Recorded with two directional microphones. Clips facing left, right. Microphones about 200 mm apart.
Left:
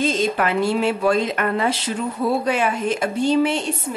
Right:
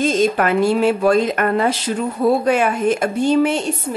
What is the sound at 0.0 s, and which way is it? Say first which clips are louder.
A woman's voice: right 4 dB; 45° right (ahead or behind).